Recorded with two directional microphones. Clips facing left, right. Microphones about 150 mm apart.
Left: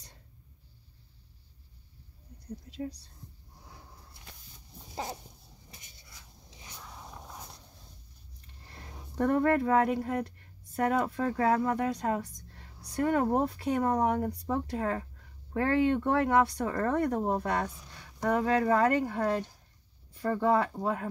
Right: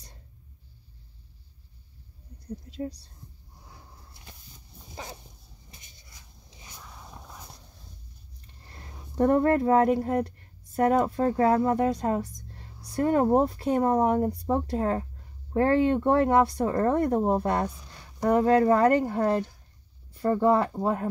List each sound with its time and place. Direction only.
9.1 s speech: 30° right (ahead or behind)
12.9 s speech: 35° right (ahead or behind)